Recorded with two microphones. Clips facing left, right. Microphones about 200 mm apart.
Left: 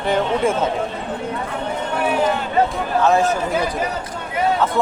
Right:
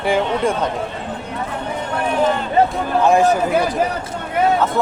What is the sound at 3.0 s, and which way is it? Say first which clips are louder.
Speech: right 2 dB; 15° right (ahead or behind).